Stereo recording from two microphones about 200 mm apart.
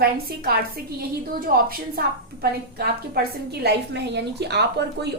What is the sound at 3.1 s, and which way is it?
A woman's voice, 55° right (ahead or behind).